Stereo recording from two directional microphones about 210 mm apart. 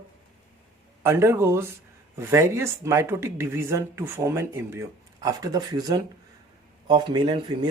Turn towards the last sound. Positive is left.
turn(degrees=-20)  # may be behind; listen again after turning